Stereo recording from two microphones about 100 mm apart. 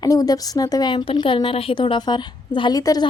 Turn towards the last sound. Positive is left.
turn(degrees=40)  # may be behind; listen again after turning